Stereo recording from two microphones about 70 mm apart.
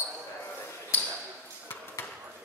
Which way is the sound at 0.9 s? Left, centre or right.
Left.